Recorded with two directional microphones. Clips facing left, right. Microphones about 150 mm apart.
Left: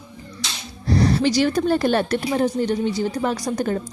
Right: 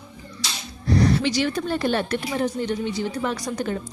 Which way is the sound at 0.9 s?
35° left (ahead or behind).